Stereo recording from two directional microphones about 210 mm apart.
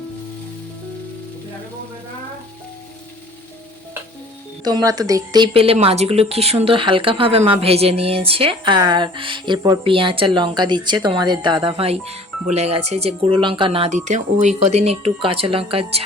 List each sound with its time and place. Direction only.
4.6 s speech: 15° right (ahead or behind)